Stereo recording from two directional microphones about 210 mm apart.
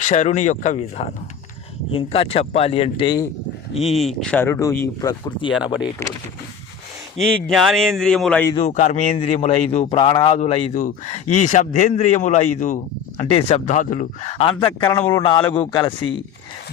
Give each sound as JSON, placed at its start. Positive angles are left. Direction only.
{"t": 0.0, "sound": "speech", "side_deg": 35}
{"t": 3.8, "sound": "speech", "side_deg": 0}
{"t": 7.2, "sound": "a man's voice", "side_deg": 5}
{"t": 8.5, "sound": "speech", "side_deg": 30}